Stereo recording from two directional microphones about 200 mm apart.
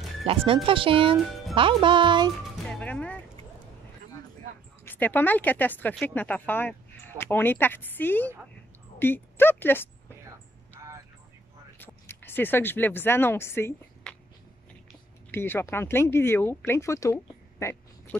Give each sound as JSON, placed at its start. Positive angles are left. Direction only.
{"t": 0.2, "sound": "speech", "side_deg": -30}
{"t": 2.7, "sound": "music", "side_deg": 5}
{"t": 4.8, "sound": "speech", "side_deg": 10}
{"t": 10.8, "sound": "a sound", "side_deg": -15}
{"t": 11.8, "sound": "speech", "side_deg": 10}
{"t": 15.3, "sound": "speech", "side_deg": 10}